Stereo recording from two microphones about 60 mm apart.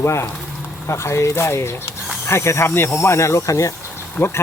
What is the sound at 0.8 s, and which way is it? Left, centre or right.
Speech, left.